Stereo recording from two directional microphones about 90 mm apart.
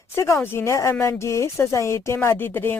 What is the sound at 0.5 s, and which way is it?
Speech, 30° left (ahead or behind).